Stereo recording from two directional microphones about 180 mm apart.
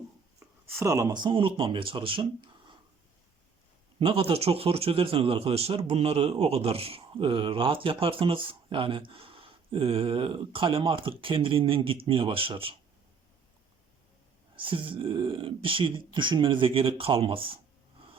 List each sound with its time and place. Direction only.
0.3 s speech: 15° right (ahead or behind)
4.0 s speech: 30° right (ahead or behind)
14.5 s speech: 30° right (ahead or behind)